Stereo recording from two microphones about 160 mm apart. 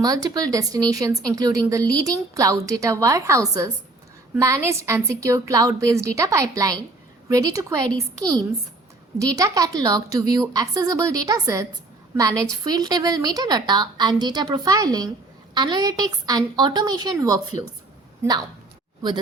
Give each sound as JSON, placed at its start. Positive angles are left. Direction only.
{"t": 0.0, "sound": "a woman's voice", "side_deg": -25}